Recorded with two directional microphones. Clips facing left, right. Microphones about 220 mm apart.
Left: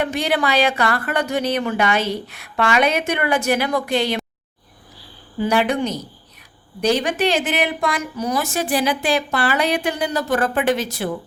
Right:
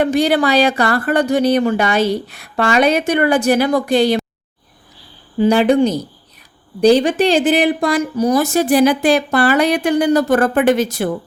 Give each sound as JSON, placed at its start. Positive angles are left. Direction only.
{"t": 0.0, "sound": "speech", "side_deg": -35}
{"t": 5.4, "sound": "speech", "side_deg": -30}